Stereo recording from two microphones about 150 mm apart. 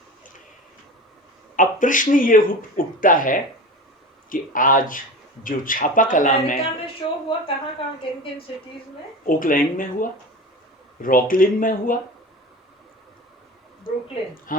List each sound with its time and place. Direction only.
1.5 s speech: 60° left (ahead or behind)
6.8 s a woman's voice: 35° left (ahead or behind)
9.2 s speech: 65° left (ahead or behind)